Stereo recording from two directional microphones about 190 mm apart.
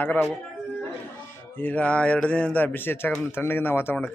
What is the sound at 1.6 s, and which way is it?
A man's voice, 10° left (ahead or behind).